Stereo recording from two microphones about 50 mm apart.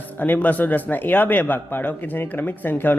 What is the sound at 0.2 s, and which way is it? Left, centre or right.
Speech, left.